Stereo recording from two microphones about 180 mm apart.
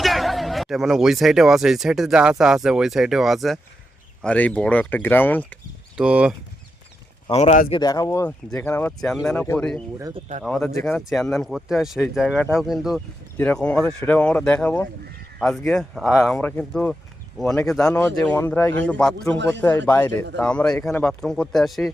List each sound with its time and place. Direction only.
0.0 s speech: centre (ahead or behind)
6.0 s speech: 5° right (ahead or behind)
7.3 s speech: 35° left (ahead or behind)
7.7 s speech: 20° left (ahead or behind); by 9.8 s 5° left (ahead or behind)
10.2 s speech: 40° right (ahead or behind)
10.4 s speech: centre (ahead or behind)
16.4 s speech: 10° left (ahead or behind)